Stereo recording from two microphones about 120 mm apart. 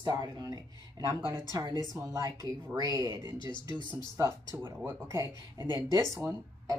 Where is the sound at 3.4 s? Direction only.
40° left (ahead or behind).